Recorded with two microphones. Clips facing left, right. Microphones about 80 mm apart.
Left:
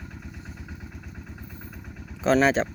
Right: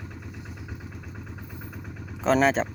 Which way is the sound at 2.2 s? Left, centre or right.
Centre.